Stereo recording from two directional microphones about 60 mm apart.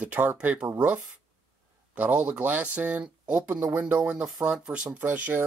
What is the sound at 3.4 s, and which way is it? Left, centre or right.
Speech, right.